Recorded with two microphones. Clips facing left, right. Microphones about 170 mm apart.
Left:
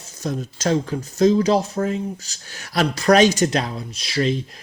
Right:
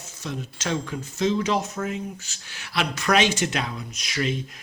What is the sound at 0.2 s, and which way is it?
Speech, 40° left (ahead or behind).